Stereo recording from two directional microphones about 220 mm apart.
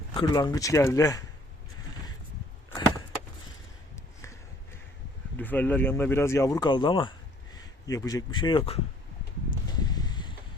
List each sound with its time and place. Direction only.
0.1 s speech: 20° left (ahead or behind)
5.4 s speech: 10° left (ahead or behind); by 8.8 s 25° left (ahead or behind)
9.7 s a sound: 20° left (ahead or behind)